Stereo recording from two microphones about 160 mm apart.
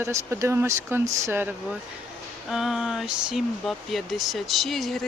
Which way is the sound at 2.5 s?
Centre (ahead or behind).